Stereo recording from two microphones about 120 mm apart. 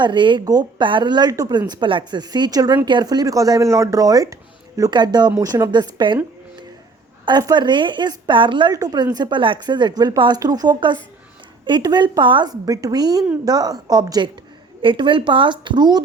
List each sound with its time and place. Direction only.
0.0 s speech: 40° right (ahead or behind)
5.7 s speech: 40° right (ahead or behind)
7.3 s speech: 35° right (ahead or behind)